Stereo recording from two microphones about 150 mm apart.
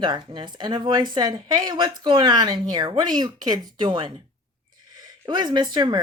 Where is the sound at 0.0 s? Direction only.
30° right (ahead or behind).